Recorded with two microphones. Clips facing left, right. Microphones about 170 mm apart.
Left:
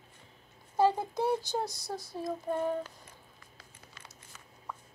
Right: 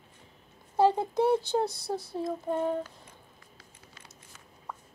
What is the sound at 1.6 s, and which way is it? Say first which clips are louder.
Humming: right 6 dB; 25° right (ahead or behind).